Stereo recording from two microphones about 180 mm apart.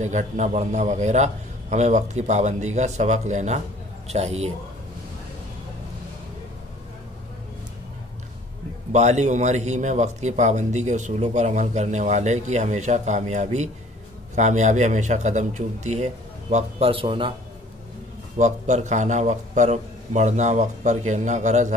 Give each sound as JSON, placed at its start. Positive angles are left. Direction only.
{"t": 0.0, "sound": "a man's voice", "side_deg": -40}
{"t": 8.9, "sound": "a man's voice", "side_deg": -40}
{"t": 18.4, "sound": "a man's voice", "side_deg": -40}